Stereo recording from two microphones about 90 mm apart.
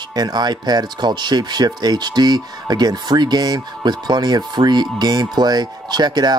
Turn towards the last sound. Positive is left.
turn(degrees=-50)  # may be behind; listen again after turning